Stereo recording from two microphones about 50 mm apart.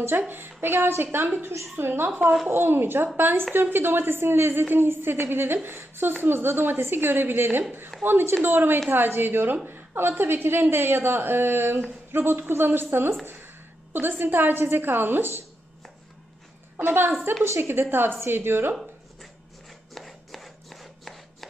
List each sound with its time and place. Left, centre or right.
0.3 s a woman's voice: right
16.8 s a woman's voice: right
19.9 s chopping: centre